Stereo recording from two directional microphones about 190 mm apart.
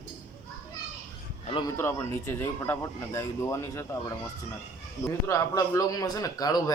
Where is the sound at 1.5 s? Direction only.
25° left (ahead or behind).